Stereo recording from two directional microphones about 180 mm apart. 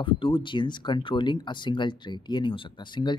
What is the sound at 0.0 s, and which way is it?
Speech, 30° left (ahead or behind).